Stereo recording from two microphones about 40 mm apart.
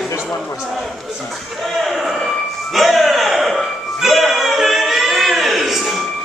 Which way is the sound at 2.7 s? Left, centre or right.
Centre.